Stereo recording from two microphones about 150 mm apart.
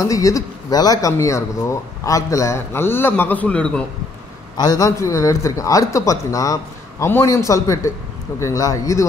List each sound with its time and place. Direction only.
0.0 s a man's voice: 20° left (ahead or behind)
4.6 s a man's voice: 25° left (ahead or behind)